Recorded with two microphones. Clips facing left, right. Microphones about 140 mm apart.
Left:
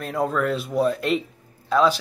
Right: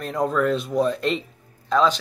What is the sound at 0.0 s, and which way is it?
Speech, 5° left (ahead or behind).